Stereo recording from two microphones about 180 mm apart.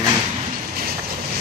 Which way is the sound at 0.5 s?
55° right (ahead or behind).